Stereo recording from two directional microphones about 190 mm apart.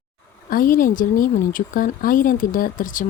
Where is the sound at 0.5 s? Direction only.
45° left (ahead or behind).